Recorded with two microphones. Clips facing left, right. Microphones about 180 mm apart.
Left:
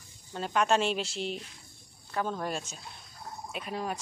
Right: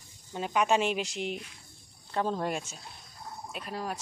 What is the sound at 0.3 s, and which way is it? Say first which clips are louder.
Speech: even; 10° right (ahead or behind).